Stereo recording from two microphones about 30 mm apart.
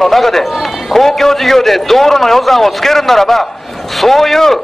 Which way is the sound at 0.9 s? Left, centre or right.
Centre.